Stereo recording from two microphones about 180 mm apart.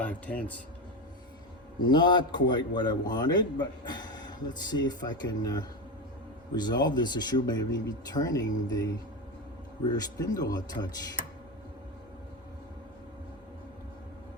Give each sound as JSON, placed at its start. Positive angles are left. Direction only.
{"t": 0.0, "sound": "speech", "side_deg": 10}
{"t": 1.8, "sound": "a man's voice", "side_deg": 25}